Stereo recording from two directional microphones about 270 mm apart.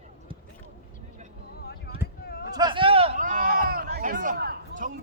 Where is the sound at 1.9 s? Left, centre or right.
Left.